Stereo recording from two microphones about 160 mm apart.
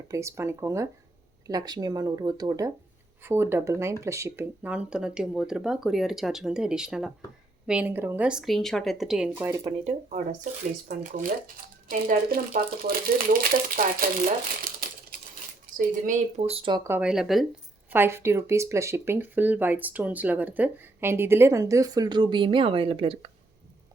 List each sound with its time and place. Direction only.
0.1 s speech: 20° right (ahead or behind)
9.6 s speech: 45° right (ahead or behind)
15.8 s speech: 50° right (ahead or behind); by 16.8 s 30° right (ahead or behind)
16.8 s speech: 10° right (ahead or behind)
17.9 s speech: 15° right (ahead or behind); by 23.3 s 35° right (ahead or behind)